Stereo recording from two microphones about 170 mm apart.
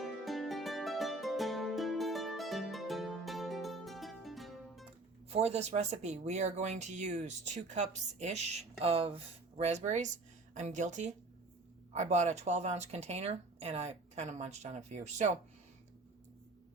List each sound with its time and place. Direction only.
0.0 s music: centre (ahead or behind)
5.3 s speech: 40° right (ahead or behind)